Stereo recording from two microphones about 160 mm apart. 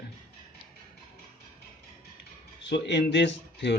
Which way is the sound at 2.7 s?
90° left.